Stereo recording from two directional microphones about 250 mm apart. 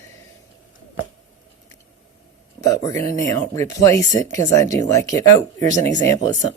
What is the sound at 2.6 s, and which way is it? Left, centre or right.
Speech, centre.